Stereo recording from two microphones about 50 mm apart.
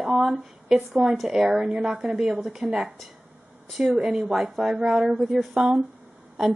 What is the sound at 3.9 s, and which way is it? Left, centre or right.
A woman's voice, centre.